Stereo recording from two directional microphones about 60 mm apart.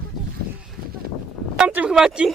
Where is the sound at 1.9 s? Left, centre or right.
Centre.